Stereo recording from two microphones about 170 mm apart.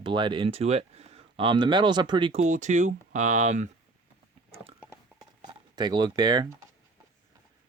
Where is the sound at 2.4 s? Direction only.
45° right (ahead or behind).